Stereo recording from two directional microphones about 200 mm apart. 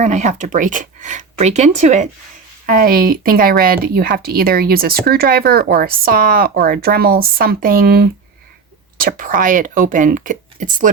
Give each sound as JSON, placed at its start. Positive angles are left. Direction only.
{"t": 0.0, "sound": "speech", "side_deg": -35}